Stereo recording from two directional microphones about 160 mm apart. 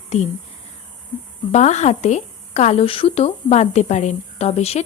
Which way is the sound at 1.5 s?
45° left (ahead or behind).